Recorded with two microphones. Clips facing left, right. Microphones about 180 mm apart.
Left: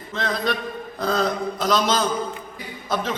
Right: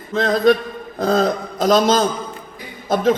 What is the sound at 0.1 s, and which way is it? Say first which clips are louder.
A man's voice: right 10 dB; 45° right (ahead or behind).